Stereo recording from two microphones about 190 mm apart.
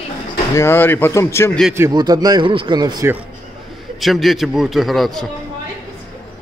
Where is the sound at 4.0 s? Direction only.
Centre (ahead or behind).